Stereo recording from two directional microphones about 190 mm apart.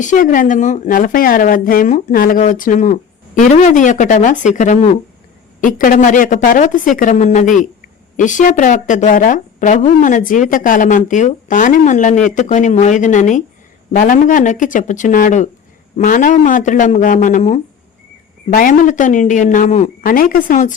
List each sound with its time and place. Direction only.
0.0 s a woman's voice: 40° left (ahead or behind)